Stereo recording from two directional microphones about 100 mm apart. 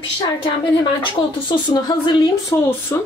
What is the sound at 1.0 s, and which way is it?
Speech, 50° left (ahead or behind).